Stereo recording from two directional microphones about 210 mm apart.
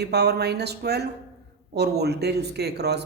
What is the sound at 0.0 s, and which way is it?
Speech, 50° right (ahead or behind).